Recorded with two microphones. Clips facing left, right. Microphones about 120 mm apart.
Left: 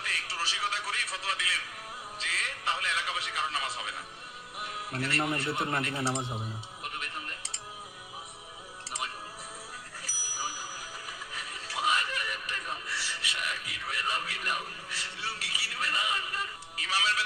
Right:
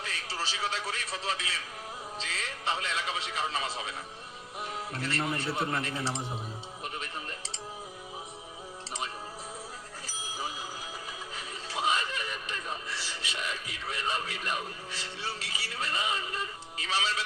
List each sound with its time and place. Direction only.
0.0 s a man's voice: 25° right (ahead or behind)
5.0 s a man's voice: 25° right (ahead or behind)
7.0 s music: 25° right (ahead or behind)
10.1 s bicycle bell: 25° right (ahead or behind)
11.3 s music: 25° right (ahead or behind)